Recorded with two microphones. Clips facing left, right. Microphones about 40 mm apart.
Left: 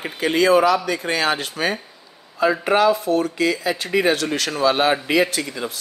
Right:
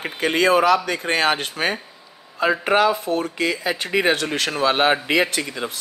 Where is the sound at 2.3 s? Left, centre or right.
Right.